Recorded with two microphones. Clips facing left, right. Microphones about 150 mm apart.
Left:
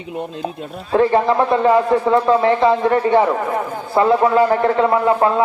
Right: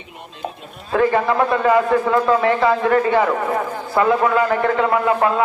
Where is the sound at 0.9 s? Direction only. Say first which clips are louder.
Left 2 dB; 30° left (ahead or behind).